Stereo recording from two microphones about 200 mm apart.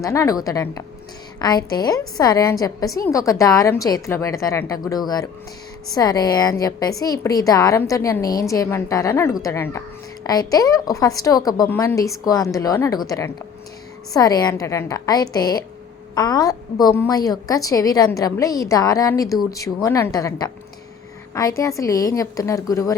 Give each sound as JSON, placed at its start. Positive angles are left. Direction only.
{"t": 0.0, "sound": "a woman's voice", "side_deg": 15}
{"t": 21.6, "sound": "a woman's voice", "side_deg": 15}